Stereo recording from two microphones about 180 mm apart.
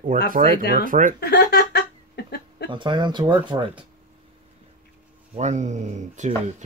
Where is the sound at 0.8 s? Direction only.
45° right (ahead or behind).